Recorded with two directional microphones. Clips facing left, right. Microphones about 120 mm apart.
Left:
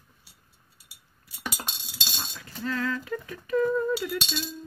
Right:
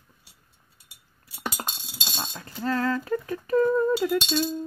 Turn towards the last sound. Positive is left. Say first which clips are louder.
# right 8 dB
turn(degrees=-40)  # may be behind; listen again after turning